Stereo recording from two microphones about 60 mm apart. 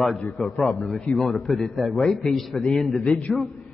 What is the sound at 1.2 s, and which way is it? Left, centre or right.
A man's voice, centre.